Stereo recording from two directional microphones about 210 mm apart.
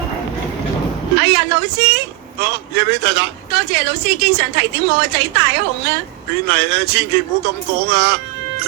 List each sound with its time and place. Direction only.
1.2 s a man's voice: 55° right (ahead or behind)